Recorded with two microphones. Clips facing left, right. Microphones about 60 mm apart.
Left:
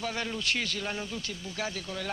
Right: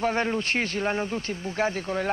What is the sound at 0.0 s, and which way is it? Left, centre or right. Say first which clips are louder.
Speech: right 8 dB; right.